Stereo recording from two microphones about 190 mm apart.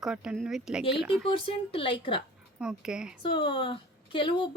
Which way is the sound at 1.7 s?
30° left (ahead or behind).